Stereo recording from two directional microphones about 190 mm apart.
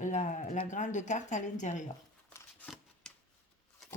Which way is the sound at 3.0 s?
5° left (ahead or behind).